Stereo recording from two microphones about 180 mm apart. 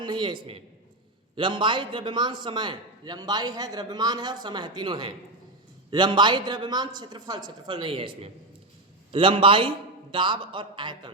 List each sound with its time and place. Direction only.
0.0 s a man's voice: 25° right (ahead or behind)